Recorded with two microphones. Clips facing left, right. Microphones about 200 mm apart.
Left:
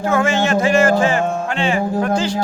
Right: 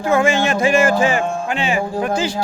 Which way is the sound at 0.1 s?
10° right (ahead or behind).